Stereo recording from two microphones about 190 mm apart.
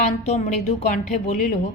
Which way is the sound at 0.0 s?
40° left (ahead or behind).